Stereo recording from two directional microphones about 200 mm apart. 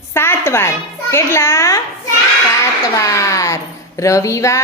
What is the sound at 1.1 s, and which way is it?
Speech, 15° left (ahead or behind).